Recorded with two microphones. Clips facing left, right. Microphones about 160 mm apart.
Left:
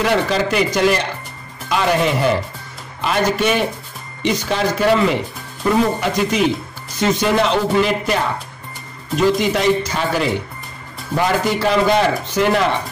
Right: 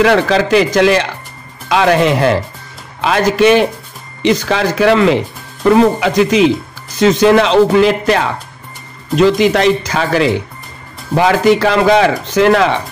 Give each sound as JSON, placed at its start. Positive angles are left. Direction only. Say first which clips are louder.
{"t": 0.0, "sound": "speech", "louder": "right 6 dB", "side_deg": -90}